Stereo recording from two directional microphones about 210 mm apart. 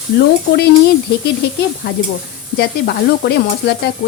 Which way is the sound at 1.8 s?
50° left (ahead or behind).